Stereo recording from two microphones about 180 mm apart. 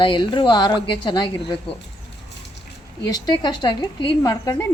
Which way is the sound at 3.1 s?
25° left (ahead or behind).